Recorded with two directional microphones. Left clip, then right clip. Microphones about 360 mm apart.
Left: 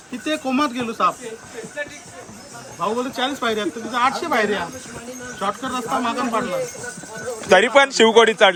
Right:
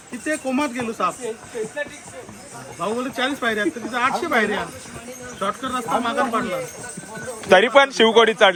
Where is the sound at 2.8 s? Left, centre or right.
Left.